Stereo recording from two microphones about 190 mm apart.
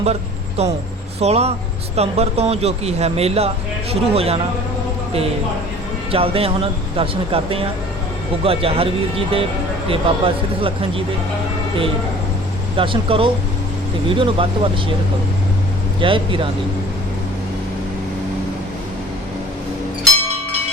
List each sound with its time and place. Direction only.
0.0 s speech: 35° right (ahead or behind)
6.1 s a man's voice: 30° right (ahead or behind)
12.7 s a man's voice: 25° right (ahead or behind)
16.0 s a man's voice: 25° right (ahead or behind)